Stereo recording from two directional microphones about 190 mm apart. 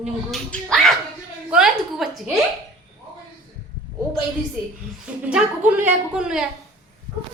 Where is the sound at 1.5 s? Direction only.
5° right (ahead or behind).